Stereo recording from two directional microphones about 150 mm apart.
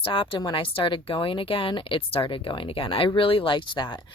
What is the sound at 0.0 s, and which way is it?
Speech, 35° left (ahead or behind).